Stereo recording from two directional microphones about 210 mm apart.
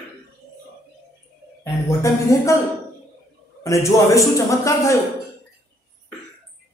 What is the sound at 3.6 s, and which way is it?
Speech, 15° left (ahead or behind).